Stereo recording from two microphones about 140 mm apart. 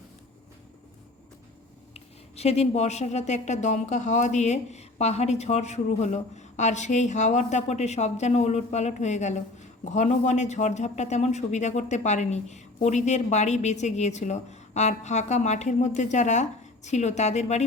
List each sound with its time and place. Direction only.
1.9 s speech: 50° left (ahead or behind)